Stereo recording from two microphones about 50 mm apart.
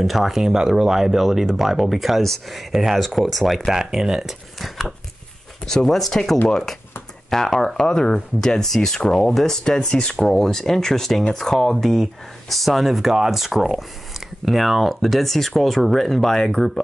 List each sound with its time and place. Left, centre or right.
0.0 s speech: centre
2.7 s speech: centre